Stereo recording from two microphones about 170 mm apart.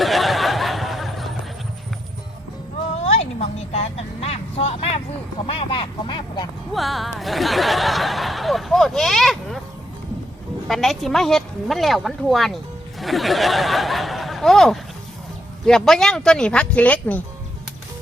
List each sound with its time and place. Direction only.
0.0 s a sound: centre (ahead or behind)
3.0 s vehicle: 40° left (ahead or behind)
6.7 s chuckle: centre (ahead or behind)
10.7 s speech: centre (ahead or behind)